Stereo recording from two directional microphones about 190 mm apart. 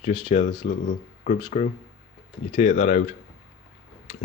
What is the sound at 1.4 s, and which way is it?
Speech, 25° left (ahead or behind).